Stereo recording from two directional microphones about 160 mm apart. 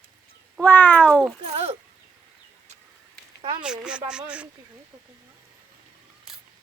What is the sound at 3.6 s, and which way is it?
Speech, 5° right (ahead or behind).